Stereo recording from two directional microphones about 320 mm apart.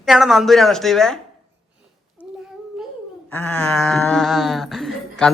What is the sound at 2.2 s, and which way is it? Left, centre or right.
Child singing, centre.